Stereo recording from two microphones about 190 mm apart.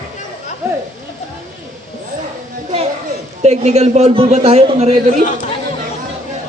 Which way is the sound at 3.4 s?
35° right (ahead or behind).